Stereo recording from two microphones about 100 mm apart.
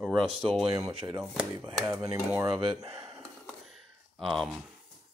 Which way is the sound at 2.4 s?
65° right (ahead or behind).